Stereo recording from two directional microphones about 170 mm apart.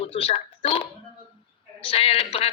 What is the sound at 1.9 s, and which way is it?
Speech, 35° left (ahead or behind).